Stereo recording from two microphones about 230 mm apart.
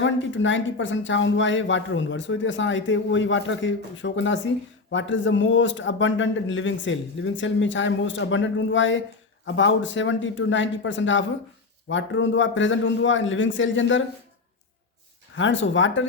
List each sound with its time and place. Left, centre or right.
0.0 s a man's voice: left
15.4 s a man's voice: left